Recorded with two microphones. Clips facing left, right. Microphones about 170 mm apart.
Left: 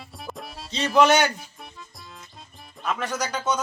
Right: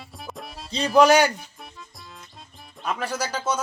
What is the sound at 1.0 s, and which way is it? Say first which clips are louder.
Speech: right 2 dB; 35° right (ahead or behind).